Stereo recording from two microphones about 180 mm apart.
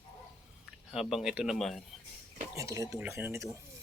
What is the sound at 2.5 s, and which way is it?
Speech, 15° right (ahead or behind).